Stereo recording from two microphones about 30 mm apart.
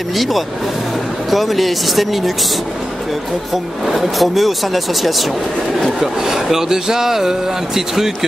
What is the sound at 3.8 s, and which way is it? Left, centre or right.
Speech, centre.